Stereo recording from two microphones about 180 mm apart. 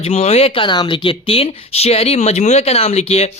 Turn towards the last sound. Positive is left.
turn(degrees=35)  # may be behind; listen again after turning